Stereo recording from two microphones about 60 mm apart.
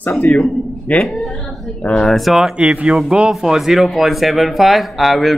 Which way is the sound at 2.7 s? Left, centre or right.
Centre.